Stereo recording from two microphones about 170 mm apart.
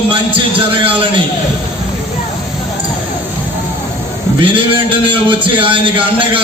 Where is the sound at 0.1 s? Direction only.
30° right (ahead or behind).